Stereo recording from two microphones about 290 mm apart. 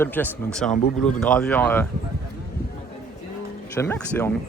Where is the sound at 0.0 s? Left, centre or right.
Centre.